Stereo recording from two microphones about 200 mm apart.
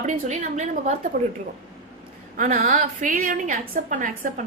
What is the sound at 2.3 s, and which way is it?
A woman's voice, 45° right (ahead or behind).